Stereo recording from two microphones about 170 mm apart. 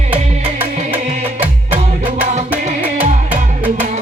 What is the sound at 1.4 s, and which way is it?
Music, 10° right (ahead or behind).